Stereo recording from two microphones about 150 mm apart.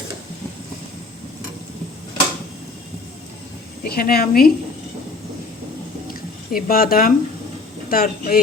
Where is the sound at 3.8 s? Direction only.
80° left.